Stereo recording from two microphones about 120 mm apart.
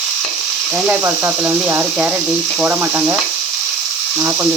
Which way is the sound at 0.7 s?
10° right (ahead or behind).